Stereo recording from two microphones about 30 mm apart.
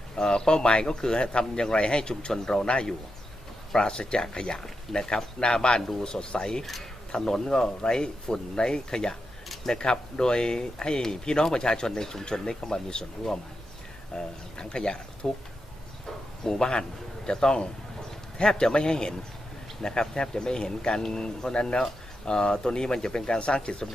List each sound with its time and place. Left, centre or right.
0.2 s speech: left
2.3 s speech: centre
5.7 s speech: left
7.2 s speech: centre
16.5 s a man's voice: left